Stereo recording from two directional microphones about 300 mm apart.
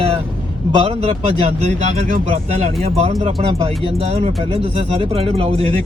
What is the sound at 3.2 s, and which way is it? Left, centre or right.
Speech, centre.